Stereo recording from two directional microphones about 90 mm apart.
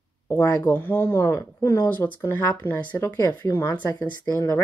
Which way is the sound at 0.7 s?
25° left (ahead or behind).